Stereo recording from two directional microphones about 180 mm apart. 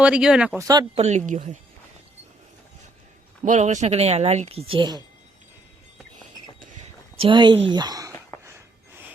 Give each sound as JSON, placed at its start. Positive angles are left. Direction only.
{"t": 0.0, "sound": "speech", "side_deg": -5}
{"t": 0.7, "sound": "speech", "side_deg": -25}
{"t": 1.0, "sound": "speech", "side_deg": -45}
{"t": 3.4, "sound": "speech", "side_deg": -40}
{"t": 6.7, "sound": "a sound", "side_deg": -40}
{"t": 7.3, "sound": "speech", "side_deg": -25}
{"t": 8.3, "sound": "a sound", "side_deg": 15}